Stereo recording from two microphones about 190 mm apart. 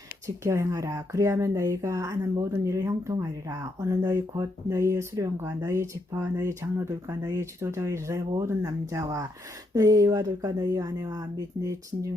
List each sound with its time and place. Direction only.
0.4 s speech: 15° right (ahead or behind)